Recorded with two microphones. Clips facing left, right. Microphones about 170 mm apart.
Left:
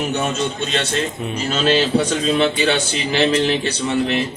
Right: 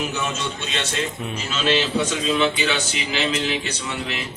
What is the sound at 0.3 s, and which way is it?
Speech, 35° left (ahead or behind).